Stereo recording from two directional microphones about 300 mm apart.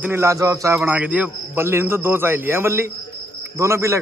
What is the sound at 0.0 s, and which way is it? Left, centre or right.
A man's voice, centre.